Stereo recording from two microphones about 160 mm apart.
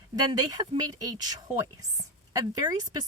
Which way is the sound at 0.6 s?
25° right (ahead or behind).